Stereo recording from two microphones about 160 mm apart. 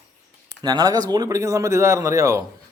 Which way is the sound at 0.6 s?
25° right (ahead or behind).